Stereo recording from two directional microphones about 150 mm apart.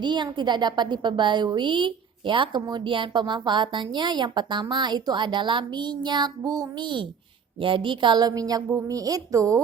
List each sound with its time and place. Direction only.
0.0 s a woman's voice: 30° right (ahead or behind)